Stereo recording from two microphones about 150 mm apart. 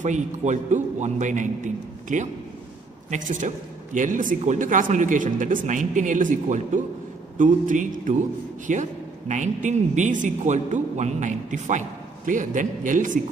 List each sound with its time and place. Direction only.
0.0 s a man's voice: 55° right (ahead or behind)